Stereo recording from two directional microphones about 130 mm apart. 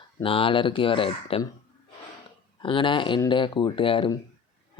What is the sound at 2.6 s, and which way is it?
Speech, 40° left (ahead or behind).